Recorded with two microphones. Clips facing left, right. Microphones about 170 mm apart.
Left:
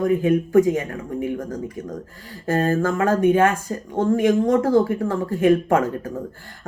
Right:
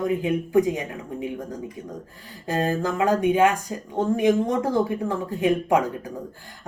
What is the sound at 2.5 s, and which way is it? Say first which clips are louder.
Speech: left 4 dB; 15° right (ahead or behind).